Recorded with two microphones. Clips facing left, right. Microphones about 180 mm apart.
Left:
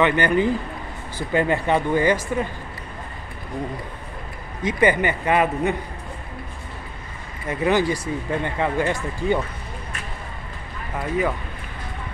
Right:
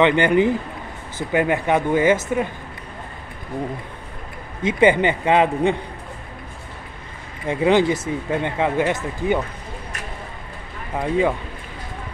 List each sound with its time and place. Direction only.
0.0 s speech: 20° right (ahead or behind)
4.6 s speech: 25° right (ahead or behind)
7.4 s speech: 20° right (ahead or behind)
11.0 s speech: 25° right (ahead or behind)